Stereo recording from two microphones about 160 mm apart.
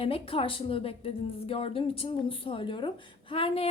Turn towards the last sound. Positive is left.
turn(degrees=35)  # may be behind; listen again after turning